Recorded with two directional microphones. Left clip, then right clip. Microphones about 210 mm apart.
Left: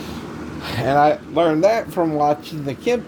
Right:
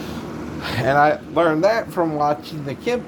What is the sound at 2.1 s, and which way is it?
Speech, 10° left (ahead or behind).